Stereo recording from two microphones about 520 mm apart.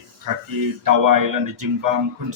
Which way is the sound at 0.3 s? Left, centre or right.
Right.